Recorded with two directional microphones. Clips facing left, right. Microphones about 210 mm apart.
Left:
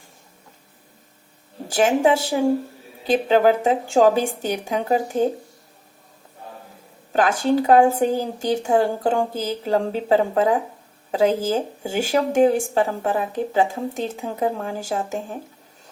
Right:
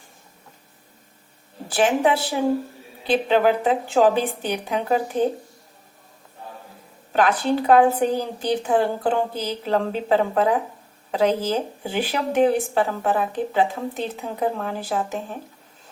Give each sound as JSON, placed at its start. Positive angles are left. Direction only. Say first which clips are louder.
{"t": 1.6, "sound": "a sound", "louder": "left 1 dB", "side_deg": 45}
{"t": 3.0, "sound": "a woman's voice", "louder": "left 2 dB", "side_deg": 45}
{"t": 7.1, "sound": "a woman's voice", "louder": "left 1 dB", "side_deg": 45}